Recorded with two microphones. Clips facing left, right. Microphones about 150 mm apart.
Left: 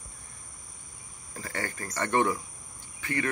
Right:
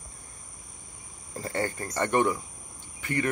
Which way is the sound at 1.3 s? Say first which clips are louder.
Right 6 dB; 25° right (ahead or behind).